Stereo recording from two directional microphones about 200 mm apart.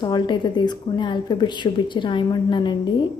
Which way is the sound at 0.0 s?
20° left (ahead or behind).